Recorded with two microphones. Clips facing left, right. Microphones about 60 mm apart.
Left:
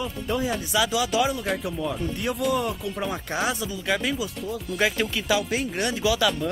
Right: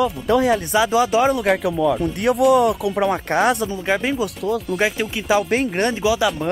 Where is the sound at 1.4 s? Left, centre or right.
Right.